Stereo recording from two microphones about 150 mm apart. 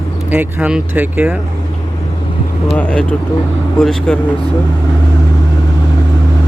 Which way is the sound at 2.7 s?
10° left (ahead or behind).